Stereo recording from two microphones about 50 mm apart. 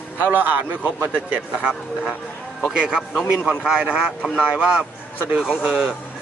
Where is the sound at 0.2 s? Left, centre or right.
Right.